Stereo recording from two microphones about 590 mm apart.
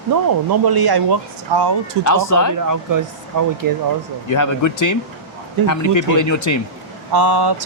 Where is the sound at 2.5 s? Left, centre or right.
Right.